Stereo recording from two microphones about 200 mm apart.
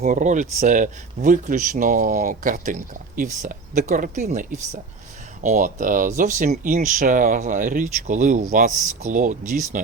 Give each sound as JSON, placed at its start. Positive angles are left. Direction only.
{"t": 0.0, "sound": "speech", "side_deg": -40}